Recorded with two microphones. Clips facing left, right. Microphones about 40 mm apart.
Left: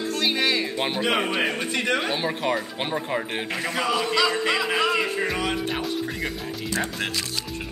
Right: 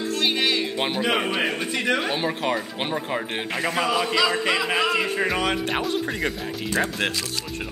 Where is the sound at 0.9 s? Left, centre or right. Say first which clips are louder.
Even; centre.